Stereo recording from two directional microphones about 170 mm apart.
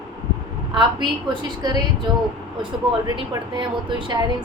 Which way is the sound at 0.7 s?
25° right (ahead or behind).